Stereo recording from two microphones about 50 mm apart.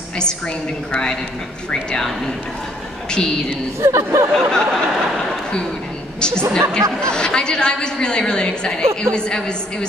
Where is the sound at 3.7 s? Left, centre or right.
Right.